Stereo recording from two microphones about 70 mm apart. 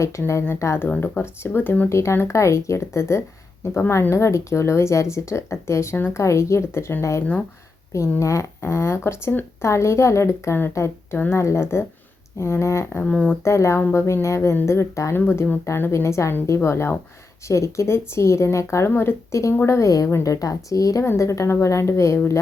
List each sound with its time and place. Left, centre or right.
0.4 s speech: left
0.9 s speech: left
1.9 s speech: left
8.2 s a woman's voice: left
13.0 s speech: centre
13.4 s speech: left
15.1 s speech: left
21.0 s speech: left